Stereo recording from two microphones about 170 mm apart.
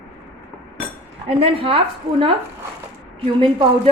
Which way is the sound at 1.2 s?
35° right (ahead or behind).